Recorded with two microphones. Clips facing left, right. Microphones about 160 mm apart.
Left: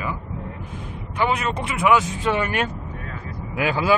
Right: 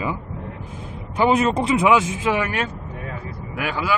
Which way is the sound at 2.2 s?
5° right (ahead or behind).